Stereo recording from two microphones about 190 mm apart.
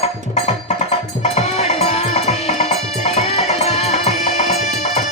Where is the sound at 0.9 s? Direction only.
35° left (ahead or behind).